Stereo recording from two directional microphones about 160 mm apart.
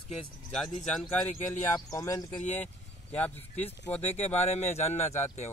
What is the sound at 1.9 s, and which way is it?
Speech, 20° left (ahead or behind).